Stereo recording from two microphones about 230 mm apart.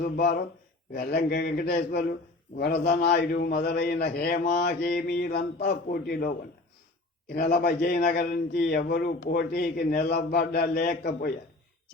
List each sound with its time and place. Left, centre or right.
0.0 s a man's voice: left
7.3 s a man's voice: left